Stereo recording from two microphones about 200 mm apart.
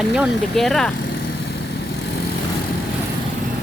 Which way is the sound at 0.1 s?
Centre (ahead or behind).